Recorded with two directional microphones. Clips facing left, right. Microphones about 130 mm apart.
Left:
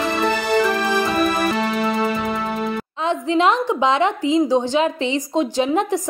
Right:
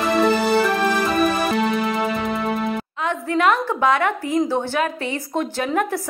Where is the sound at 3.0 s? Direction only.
25° left (ahead or behind).